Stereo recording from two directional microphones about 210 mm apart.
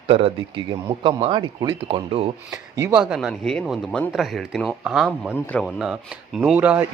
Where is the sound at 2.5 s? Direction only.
15° right (ahead or behind).